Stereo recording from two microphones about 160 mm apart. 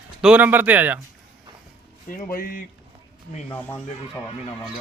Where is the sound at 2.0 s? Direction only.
60° left (ahead or behind).